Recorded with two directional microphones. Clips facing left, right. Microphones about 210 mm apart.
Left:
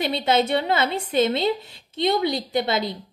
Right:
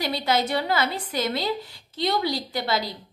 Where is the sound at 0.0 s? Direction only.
25° left (ahead or behind).